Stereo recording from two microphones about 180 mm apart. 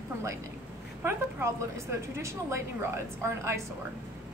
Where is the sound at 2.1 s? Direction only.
15° right (ahead or behind).